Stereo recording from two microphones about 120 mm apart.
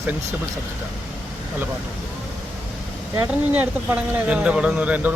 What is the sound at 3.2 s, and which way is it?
Speech, 15° right (ahead or behind).